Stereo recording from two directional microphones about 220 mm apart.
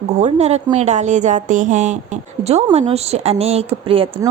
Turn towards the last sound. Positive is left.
turn(degrees=-25)  # may be behind; listen again after turning